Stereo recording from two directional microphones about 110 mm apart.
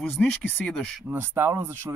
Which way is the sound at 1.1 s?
25° right (ahead or behind).